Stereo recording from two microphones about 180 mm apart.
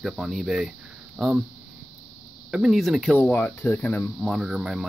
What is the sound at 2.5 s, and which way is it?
Speech, 5° right (ahead or behind).